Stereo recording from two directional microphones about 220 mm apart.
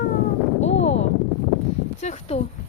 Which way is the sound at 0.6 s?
30° left (ahead or behind).